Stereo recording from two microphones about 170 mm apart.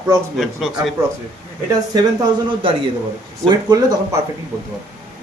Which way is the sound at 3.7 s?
20° right (ahead or behind).